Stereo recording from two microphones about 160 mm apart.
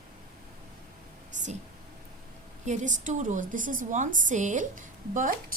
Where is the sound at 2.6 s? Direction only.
50° right (ahead or behind).